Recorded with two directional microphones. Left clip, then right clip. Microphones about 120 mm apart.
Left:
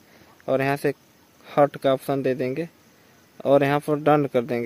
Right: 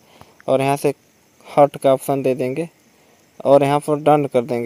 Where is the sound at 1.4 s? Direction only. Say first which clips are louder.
Right 6 dB; 25° right (ahead or behind).